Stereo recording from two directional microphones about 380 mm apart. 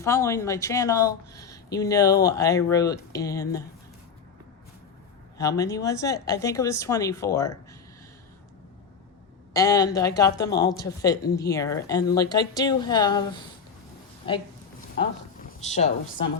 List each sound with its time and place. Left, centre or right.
0.0 s speech: centre
5.4 s speech: centre
9.5 s speech: centre
14.3 s a sound: centre